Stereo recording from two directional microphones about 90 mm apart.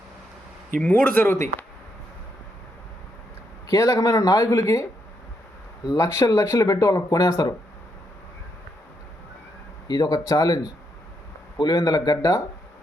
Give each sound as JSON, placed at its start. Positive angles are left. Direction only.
{"t": 0.8, "sound": "speech", "side_deg": 15}
{"t": 3.7, "sound": "speech", "side_deg": 40}
{"t": 9.8, "sound": "speech", "side_deg": 50}